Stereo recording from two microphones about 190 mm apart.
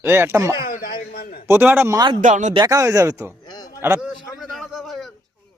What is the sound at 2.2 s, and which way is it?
Speech, 40° right (ahead or behind).